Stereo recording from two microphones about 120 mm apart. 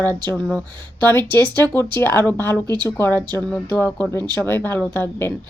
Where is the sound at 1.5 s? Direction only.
20° left (ahead or behind).